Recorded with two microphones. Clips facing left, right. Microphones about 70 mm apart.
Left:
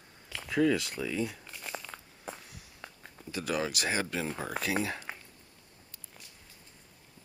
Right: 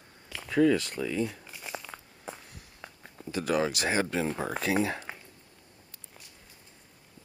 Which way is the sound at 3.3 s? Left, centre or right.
Right.